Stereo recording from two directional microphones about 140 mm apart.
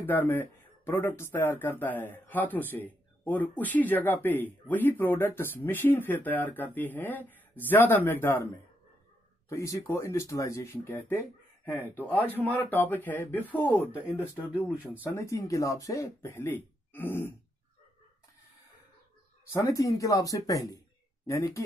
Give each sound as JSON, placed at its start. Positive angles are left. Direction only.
{"t": 0.0, "sound": "speech", "side_deg": 15}
{"t": 14.1, "sound": "speech", "side_deg": -10}
{"t": 15.0, "sound": "speech", "side_deg": 20}
{"t": 19.5, "sound": "speech", "side_deg": 25}